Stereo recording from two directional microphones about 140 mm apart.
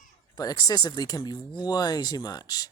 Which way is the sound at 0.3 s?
25° left (ahead or behind).